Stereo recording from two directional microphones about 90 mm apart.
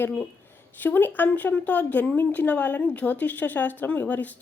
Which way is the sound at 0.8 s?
20° left (ahead or behind).